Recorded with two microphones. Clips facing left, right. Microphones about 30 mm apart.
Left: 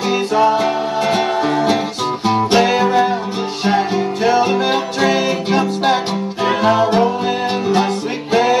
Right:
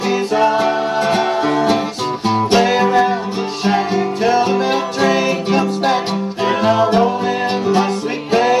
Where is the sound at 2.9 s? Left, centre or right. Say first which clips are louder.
Right 1 dB; centre.